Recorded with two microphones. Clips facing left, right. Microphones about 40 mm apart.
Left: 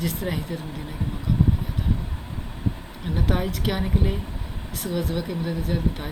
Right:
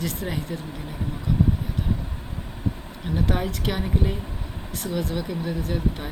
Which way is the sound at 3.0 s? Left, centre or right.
Centre.